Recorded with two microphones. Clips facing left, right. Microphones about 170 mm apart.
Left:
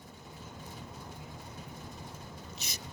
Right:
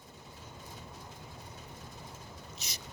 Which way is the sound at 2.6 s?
60° left (ahead or behind).